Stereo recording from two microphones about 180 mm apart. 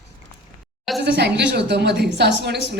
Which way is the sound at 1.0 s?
70° right (ahead or behind).